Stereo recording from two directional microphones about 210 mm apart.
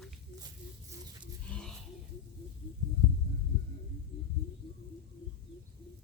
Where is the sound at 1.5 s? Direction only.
5° left (ahead or behind).